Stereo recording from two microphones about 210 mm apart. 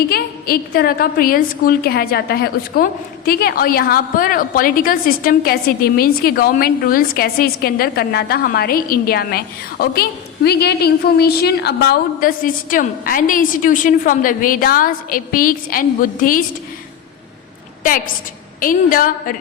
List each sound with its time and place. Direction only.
0.1 s a woman's voice: 45° left (ahead or behind)
18.6 s a woman's voice: 40° left (ahead or behind)